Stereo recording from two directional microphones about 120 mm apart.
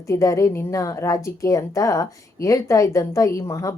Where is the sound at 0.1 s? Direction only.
25° left (ahead or behind).